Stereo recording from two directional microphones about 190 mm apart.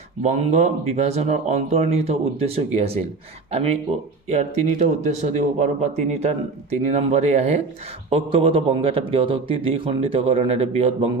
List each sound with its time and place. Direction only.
0.2 s speech: 40° right (ahead or behind)
4.3 s a man's voice: 40° right (ahead or behind)